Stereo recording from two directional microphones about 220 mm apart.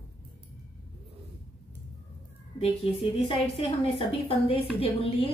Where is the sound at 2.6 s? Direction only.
25° left (ahead or behind).